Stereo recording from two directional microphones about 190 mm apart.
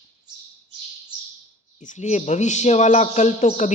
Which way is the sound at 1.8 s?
40° left (ahead or behind).